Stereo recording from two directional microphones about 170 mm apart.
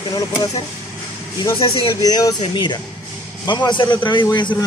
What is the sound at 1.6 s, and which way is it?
A man's voice, 25° left (ahead or behind).